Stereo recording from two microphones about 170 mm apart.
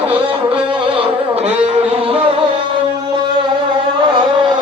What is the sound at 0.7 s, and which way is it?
Music, 30° right (ahead or behind).